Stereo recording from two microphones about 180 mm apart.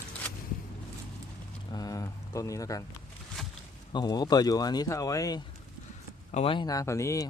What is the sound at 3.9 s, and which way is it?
Speech, 20° left (ahead or behind).